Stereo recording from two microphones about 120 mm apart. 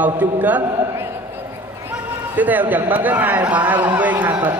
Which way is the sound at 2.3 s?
15° right (ahead or behind).